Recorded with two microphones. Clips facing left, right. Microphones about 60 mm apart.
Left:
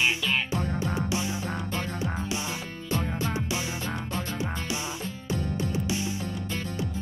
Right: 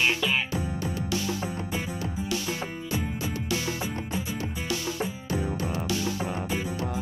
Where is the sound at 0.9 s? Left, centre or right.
Left.